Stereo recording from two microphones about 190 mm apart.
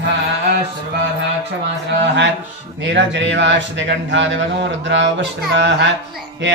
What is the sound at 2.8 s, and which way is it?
Dishes, 70° right (ahead or behind).